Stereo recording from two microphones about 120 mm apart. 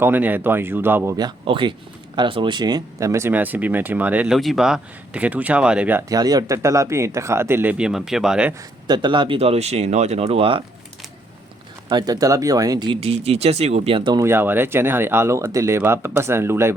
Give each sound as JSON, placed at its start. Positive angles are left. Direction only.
{"t": 0.0, "sound": "speech", "side_deg": -15}
{"t": 1.5, "sound": "speech", "side_deg": -45}
{"t": 4.4, "sound": "speech", "side_deg": 0}
{"t": 6.1, "sound": "speech", "side_deg": -35}
{"t": 8.9, "sound": "speech", "side_deg": -40}
{"t": 11.9, "sound": "speech", "side_deg": -35}
{"t": 13.0, "sound": "speech", "side_deg": -55}
{"t": 14.2, "sound": "speech", "side_deg": -20}